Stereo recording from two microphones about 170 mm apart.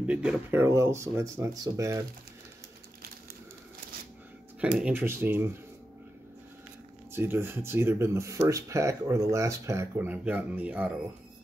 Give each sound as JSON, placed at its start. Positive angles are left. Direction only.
{"t": 0.0, "sound": "speech", "side_deg": -5}
{"t": 4.6, "sound": "speech", "side_deg": -5}
{"t": 7.1, "sound": "speech", "side_deg": -15}